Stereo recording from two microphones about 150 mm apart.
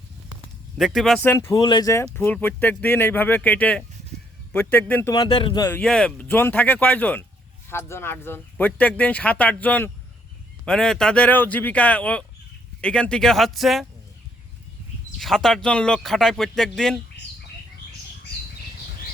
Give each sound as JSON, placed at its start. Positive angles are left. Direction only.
{"t": 0.8, "sound": "speech", "side_deg": 0}
{"t": 1.2, "sound": "speech", "side_deg": 15}
{"t": 1.5, "sound": "speech", "side_deg": 30}
{"t": 5.1, "sound": "speech", "side_deg": 30}
{"t": 5.6, "sound": "speech", "side_deg": 10}
{"t": 15.2, "sound": "speech", "side_deg": 0}